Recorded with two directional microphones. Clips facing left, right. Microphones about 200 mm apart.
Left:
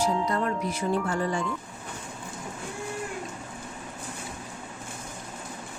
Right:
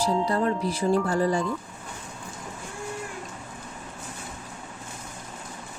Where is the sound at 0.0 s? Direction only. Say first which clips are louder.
Right 2 dB; 35° right (ahead or behind).